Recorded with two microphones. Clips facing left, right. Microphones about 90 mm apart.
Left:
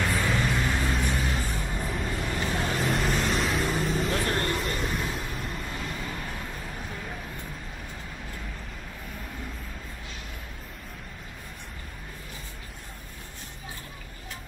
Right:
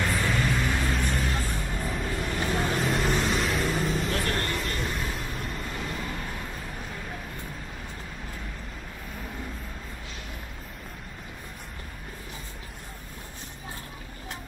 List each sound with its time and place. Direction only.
0.0 s vehicle: centre (ahead or behind)
4.1 s music: 20° left (ahead or behind)
4.6 s vehicle: centre (ahead or behind)